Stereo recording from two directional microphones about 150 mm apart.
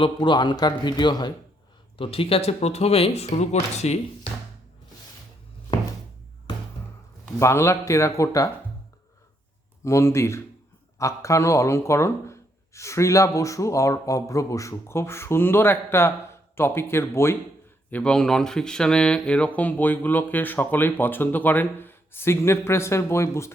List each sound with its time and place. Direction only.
0.0 s speech: 35° left (ahead or behind)
7.3 s speech: 20° left (ahead or behind)
9.8 s speech: 20° left (ahead or behind)
17.9 s speech: 5° left (ahead or behind)